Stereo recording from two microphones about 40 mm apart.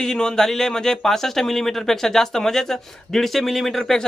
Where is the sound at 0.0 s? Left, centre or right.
Centre.